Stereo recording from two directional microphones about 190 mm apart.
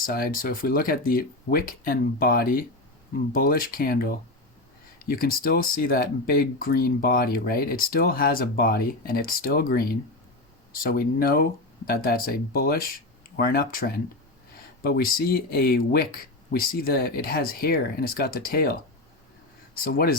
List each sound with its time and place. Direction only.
0.0 s speech: 50° left (ahead or behind)
5.0 s speech: 50° left (ahead or behind)